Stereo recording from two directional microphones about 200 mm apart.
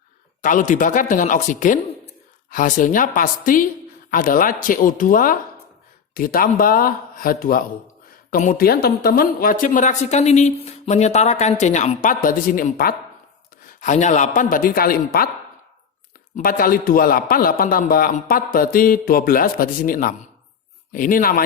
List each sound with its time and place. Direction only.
0.4 s a man's voice: 40° left (ahead or behind)
13.7 s a man's voice: 35° left (ahead or behind)
16.3 s a man's voice: 45° left (ahead or behind)